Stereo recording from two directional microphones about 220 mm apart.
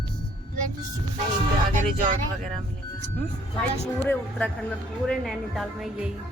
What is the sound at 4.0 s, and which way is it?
Music, 5° left (ahead or behind).